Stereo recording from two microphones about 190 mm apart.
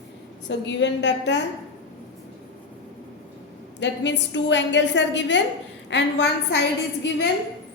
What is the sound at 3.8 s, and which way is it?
A woman's voice, 70° left (ahead or behind).